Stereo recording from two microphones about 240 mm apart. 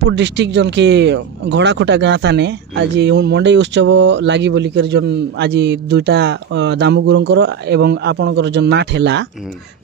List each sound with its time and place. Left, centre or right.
0.0 s speech: right